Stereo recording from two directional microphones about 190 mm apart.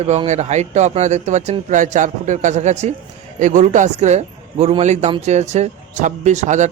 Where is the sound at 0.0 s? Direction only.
35° right (ahead or behind).